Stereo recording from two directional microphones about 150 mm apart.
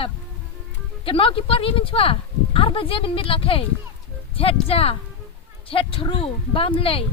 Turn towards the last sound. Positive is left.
turn(degrees=35)  # may be behind; listen again after turning